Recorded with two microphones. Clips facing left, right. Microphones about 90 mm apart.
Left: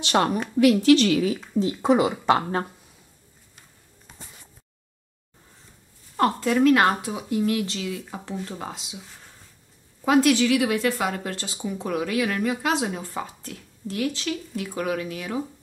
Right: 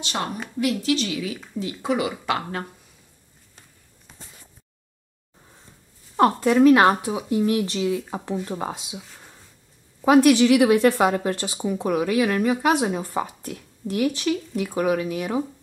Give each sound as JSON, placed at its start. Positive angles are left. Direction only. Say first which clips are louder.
{"t": 0.0, "sound": "a woman's voice", "louder": "left 7 dB", "side_deg": 65}
{"t": 1.6, "sound": "speech", "louder": "left 4 dB", "side_deg": 30}
{"t": 6.1, "sound": "a woman's voice", "louder": "right 4 dB", "side_deg": -15}
{"t": 10.0, "sound": "a woman's voice", "louder": "right 4 dB", "side_deg": -15}